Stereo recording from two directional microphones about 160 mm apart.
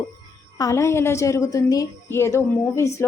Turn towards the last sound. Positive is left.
turn(degrees=20)  # may be behind; listen again after turning